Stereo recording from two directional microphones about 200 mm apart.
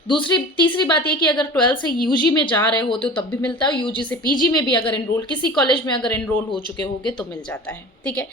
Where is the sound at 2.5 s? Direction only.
10° left (ahead or behind).